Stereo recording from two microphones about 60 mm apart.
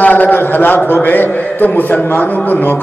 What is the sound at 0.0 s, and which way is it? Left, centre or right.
A man's voice, left.